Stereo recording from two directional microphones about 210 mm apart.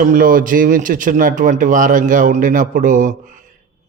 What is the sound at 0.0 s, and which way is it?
A man's voice, 40° right (ahead or behind).